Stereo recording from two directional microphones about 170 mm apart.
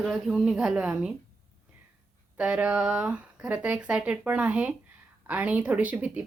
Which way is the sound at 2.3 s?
5° right (ahead or behind).